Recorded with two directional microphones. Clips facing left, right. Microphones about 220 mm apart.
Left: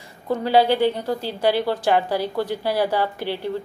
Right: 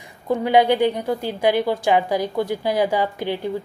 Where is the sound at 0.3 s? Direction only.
15° right (ahead or behind).